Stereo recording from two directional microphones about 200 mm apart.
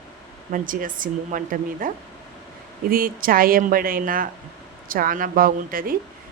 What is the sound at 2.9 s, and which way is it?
Speech, 45° right (ahead or behind).